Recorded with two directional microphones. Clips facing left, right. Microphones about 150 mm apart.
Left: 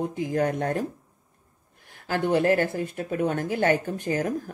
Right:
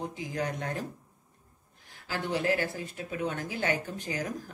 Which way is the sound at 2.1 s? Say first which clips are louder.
Left 8 dB; 55° left (ahead or behind).